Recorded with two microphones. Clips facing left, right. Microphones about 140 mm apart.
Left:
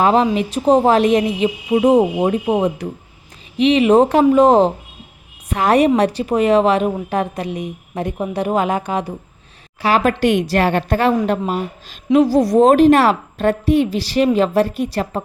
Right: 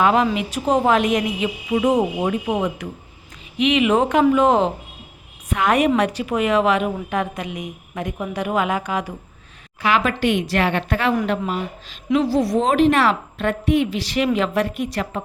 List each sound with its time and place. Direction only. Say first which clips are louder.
0.0 s a woman's voice: left 3 dB; 30° left (ahead or behind)